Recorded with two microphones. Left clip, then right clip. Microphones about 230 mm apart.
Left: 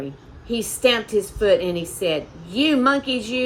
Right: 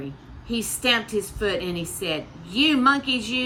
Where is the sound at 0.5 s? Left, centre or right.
Right.